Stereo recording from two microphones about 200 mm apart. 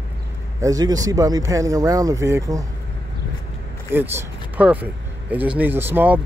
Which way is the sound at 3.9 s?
10° right (ahead or behind).